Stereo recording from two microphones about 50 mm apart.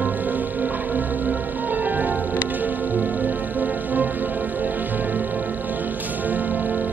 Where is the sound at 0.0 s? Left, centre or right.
Right.